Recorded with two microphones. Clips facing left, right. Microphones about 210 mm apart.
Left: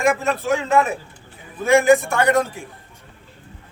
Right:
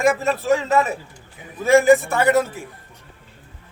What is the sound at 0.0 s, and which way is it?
A man's voice, 5° right (ahead or behind).